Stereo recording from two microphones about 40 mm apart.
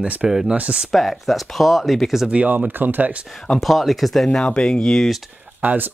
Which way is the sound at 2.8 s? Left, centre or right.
Right.